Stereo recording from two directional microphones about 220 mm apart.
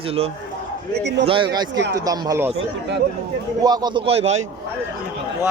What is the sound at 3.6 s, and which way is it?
Speech, 20° right (ahead or behind).